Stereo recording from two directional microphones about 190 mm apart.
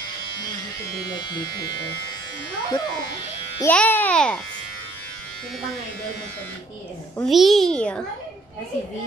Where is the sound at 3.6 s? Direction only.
10° left (ahead or behind).